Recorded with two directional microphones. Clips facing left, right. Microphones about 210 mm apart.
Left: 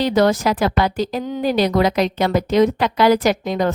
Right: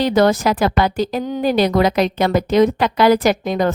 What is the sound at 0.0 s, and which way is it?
A woman's voice, 50° right (ahead or behind).